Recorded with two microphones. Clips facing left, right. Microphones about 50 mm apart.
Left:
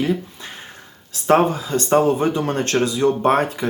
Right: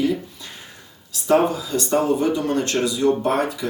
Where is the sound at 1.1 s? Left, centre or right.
Left.